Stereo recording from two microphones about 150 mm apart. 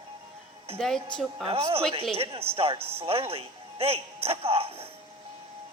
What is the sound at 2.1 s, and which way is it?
A man's voice, 40° right (ahead or behind).